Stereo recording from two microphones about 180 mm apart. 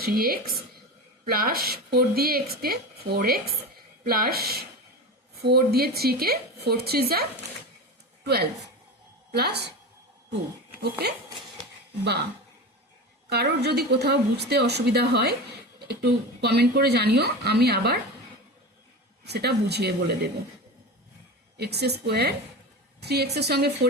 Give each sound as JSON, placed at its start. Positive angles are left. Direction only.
{"t": 0.0, "sound": "a woman's voice", "side_deg": -55}
{"t": 11.0, "sound": "a woman's voice", "side_deg": -60}
{"t": 13.3, "sound": "a woman's voice", "side_deg": -65}
{"t": 19.2, "sound": "a woman's voice", "side_deg": -65}
{"t": 21.6, "sound": "a woman's voice", "side_deg": -65}